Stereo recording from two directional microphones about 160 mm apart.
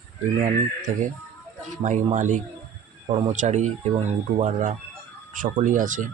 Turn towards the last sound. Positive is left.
turn(degrees=-55)  # may be behind; listen again after turning